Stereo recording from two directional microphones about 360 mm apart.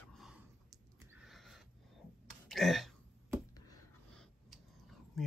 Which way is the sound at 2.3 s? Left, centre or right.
Centre.